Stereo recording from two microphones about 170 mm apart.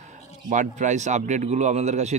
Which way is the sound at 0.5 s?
45° right (ahead or behind).